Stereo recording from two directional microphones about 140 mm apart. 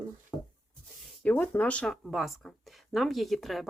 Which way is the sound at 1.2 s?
10° left (ahead or behind).